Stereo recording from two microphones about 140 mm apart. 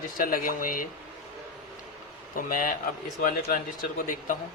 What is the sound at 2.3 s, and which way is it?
Speech, 80° left.